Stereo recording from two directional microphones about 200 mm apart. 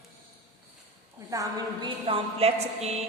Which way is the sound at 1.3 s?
20° right (ahead or behind).